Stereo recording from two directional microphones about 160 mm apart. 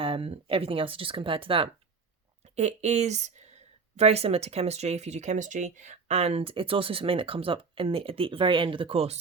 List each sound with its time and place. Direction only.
0.0 s speech: 35° right (ahead or behind)